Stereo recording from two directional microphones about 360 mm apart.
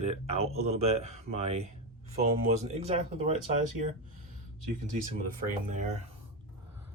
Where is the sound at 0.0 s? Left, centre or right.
Centre.